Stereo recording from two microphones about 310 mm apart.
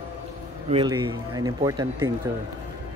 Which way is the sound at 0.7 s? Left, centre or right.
Centre.